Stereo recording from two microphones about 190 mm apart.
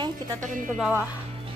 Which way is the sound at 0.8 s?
10° right (ahead or behind).